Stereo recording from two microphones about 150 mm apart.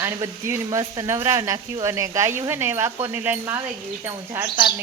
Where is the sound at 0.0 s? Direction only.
20° right (ahead or behind).